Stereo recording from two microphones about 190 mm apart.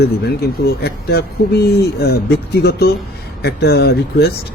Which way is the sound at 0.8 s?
55° left (ahead or behind).